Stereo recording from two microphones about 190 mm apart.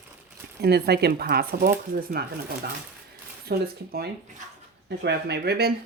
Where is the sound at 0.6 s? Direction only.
55° right (ahead or behind).